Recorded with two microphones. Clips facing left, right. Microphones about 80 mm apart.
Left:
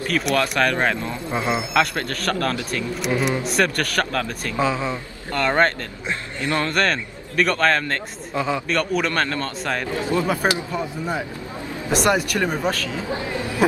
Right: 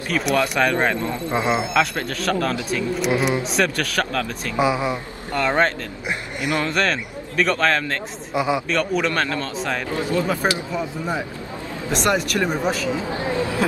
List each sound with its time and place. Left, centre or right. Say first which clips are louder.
0.1 s speech: right 1 dB; centre
4.6 s speech: right 2 dB; centre
6.7 s speech: even; centre
8.3 s speech: right 2 dB; centre
8.6 s speech: right 1 dB; centre
9.9 s speech: even; left
11.9 s speech: left 1 dB; centre
13.2 s speech: right 4 dB; right